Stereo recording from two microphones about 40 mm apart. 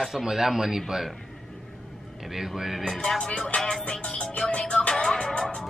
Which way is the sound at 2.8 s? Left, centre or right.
Centre.